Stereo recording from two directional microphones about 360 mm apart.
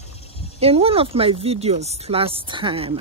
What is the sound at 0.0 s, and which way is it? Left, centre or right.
Cricket, centre.